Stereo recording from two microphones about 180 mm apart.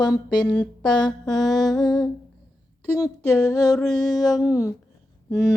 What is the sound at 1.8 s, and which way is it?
Mantra, centre (ahead or behind).